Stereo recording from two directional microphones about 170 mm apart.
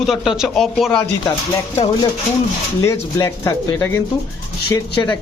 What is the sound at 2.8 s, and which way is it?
Speech, 15° left (ahead or behind).